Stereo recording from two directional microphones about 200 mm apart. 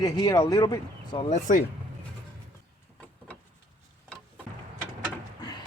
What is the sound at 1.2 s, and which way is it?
Speech, 40° left (ahead or behind).